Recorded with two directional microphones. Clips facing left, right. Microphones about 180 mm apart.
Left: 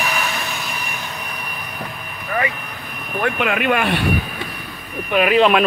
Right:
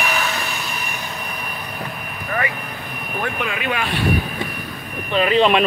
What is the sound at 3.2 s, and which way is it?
Speech, 65° left (ahead or behind).